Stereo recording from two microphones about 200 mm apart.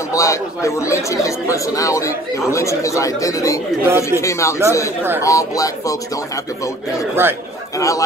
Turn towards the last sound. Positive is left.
turn(degrees=15)  # may be behind; listen again after turning